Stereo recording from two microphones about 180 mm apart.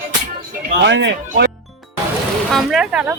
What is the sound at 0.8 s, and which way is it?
Speech, 80° right.